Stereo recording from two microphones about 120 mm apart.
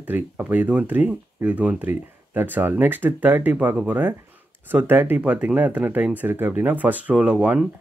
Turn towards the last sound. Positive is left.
turn(degrees=-10)  # may be behind; listen again after turning